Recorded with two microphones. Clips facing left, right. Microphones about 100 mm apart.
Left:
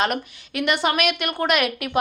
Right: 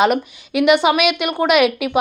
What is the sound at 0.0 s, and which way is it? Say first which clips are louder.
A woman's voice: right 7 dB; 5° right (ahead or behind).